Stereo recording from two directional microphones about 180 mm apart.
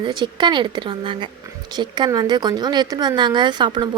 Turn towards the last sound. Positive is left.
turn(degrees=-25)  # may be behind; listen again after turning